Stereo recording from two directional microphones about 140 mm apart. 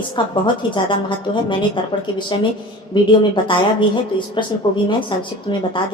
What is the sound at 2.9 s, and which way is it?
Speech, 35° left (ahead or behind).